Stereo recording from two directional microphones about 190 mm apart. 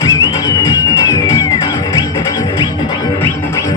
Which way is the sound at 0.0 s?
20° left (ahead or behind).